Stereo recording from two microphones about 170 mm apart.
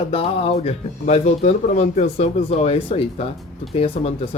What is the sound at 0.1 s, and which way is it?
Speech, 35° left (ahead or behind).